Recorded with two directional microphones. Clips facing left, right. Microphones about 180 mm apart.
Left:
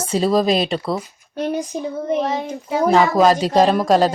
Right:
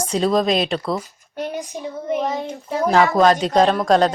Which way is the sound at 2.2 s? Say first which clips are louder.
Left 1 dB; centre (ahead or behind).